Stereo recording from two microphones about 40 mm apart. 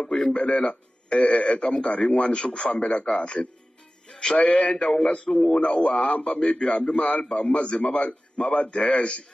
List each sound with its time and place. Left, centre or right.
0.4 s a man's voice: left
4.4 s a man's voice: left
4.7 s a man's voice: centre
5.6 s a man's voice: left